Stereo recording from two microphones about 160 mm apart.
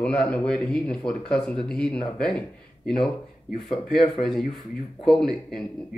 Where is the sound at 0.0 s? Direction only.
5° left (ahead or behind).